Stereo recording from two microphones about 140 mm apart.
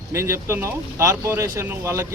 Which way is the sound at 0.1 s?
20° right (ahead or behind).